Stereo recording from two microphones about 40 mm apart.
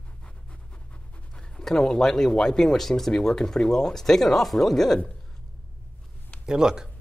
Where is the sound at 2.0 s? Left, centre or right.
Centre.